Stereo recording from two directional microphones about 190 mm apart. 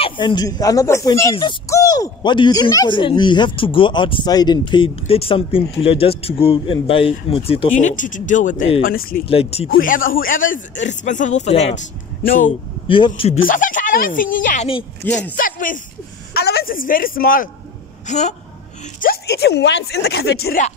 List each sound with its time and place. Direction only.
0.0 s speech: 25° left (ahead or behind)
8.8 s speech: 50° left (ahead or behind)
9.2 s speech: 30° left (ahead or behind)
9.8 s speech: 45° left (ahead or behind)
12.3 s speech: 45° left (ahead or behind)
12.8 s speech: 25° left (ahead or behind)
13.4 s speech: 45° left (ahead or behind)
15.0 s speech: 5° left (ahead or behind)
15.3 s speech: 45° left (ahead or behind)
16.3 s a woman's voice: 55° left (ahead or behind); by 18.3 s 40° left (ahead or behind)
18.9 s speech: 55° left (ahead or behind)